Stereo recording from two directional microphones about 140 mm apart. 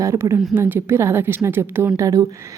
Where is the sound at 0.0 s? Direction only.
20° right (ahead or behind).